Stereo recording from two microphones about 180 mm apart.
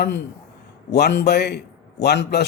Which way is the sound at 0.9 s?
65° left (ahead or behind).